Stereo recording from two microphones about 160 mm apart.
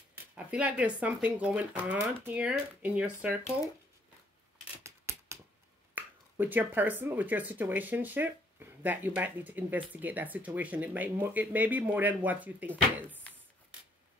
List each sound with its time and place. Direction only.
0.5 s speech: 5° right (ahead or behind)
4.8 s scissors: 15° right (ahead or behind)
5.9 s speech: 10° right (ahead or behind)